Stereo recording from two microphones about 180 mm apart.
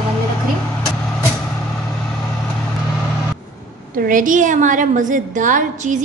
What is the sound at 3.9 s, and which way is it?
A woman's voice, 50° right (ahead or behind).